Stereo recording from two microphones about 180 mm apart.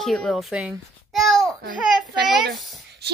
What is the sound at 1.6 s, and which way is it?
Speech, 55° right (ahead or behind).